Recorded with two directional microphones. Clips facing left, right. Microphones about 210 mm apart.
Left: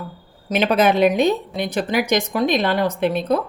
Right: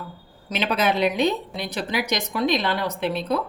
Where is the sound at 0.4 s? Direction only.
50° left (ahead or behind).